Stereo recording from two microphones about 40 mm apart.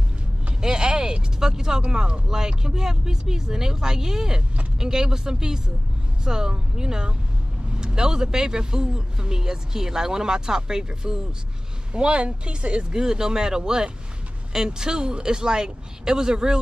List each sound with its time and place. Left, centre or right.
0.6 s a sound: right
1.8 s speech: right
13.0 s speech: centre